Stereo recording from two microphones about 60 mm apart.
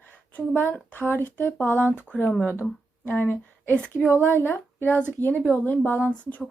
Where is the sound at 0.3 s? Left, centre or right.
Left.